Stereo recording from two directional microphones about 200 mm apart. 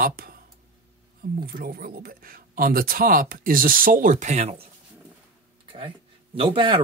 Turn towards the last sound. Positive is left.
turn(degrees=-25)  # may be behind; listen again after turning